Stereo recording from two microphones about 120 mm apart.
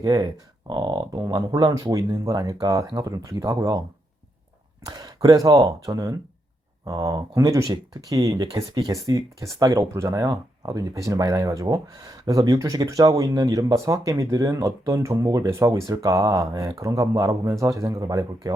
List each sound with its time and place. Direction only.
0.0 s speech: 35° right (ahead or behind)
4.9 s speech: 35° right (ahead or behind)